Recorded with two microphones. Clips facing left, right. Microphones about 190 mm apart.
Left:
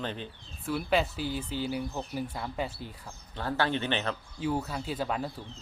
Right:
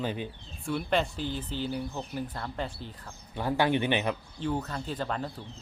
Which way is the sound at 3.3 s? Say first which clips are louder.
Right 3 dB; 15° right (ahead or behind).